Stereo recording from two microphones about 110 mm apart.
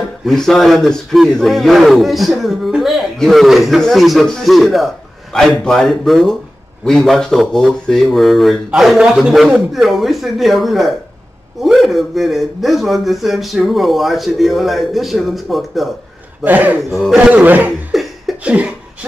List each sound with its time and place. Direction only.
0.2 s a man's voice: centre (ahead or behind)
16.4 s speech: 15° right (ahead or behind)
17.9 s cough: centre (ahead or behind)
18.4 s speech: 10° right (ahead or behind)